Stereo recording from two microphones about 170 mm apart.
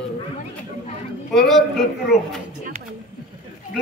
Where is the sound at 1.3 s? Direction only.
Centre (ahead or behind).